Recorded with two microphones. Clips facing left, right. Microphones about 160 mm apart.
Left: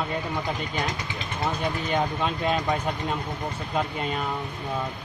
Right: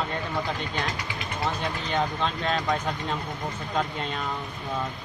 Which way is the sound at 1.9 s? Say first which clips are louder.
Right 1 dB; 10° left (ahead or behind).